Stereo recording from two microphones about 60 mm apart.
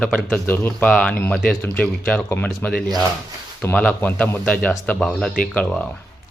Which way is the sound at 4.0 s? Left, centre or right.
Left.